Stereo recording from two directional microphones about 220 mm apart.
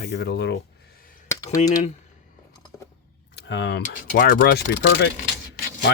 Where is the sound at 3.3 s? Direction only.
50° left (ahead or behind).